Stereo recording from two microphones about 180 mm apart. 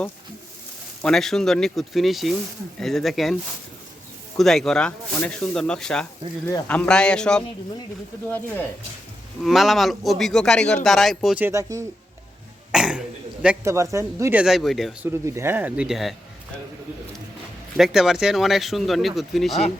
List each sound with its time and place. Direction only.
1.0 s speech: centre (ahead or behind)
4.4 s speech: centre (ahead or behind)
9.4 s speech: centre (ahead or behind)
11.4 s speech: 15° right (ahead or behind)
12.7 s throat clearing: 5° right (ahead or behind)
13.9 s speech: 15° right (ahead or behind)
14.4 s speech: centre (ahead or behind)
15.0 s speech: 15° right (ahead or behind)
17.7 s speech: centre (ahead or behind)